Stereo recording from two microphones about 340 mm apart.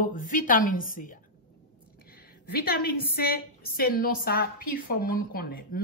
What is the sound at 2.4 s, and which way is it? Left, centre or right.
A woman's voice, left.